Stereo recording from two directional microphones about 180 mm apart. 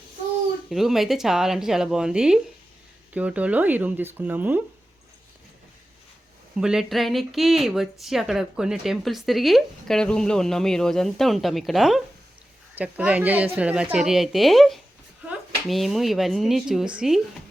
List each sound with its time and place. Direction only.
0.7 s a woman's voice: centre (ahead or behind)
6.6 s a woman's voice: 5° right (ahead or behind)